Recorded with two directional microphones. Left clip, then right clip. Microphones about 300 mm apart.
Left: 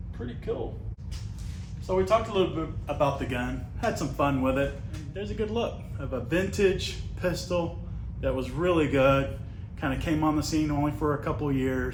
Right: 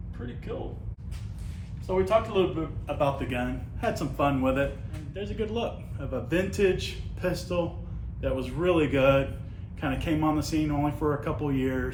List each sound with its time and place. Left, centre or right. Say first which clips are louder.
1.9 s a man's voice: even; centre